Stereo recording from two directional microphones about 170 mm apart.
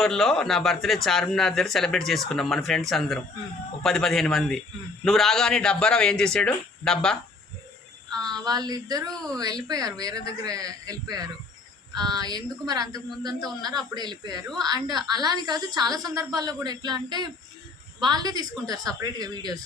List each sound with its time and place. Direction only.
0.0 s speech: centre (ahead or behind)
8.4 s a woman's voice: 25° right (ahead or behind)
9.0 s speech: 5° left (ahead or behind)
9.4 s a woman's voice: 20° right (ahead or behind)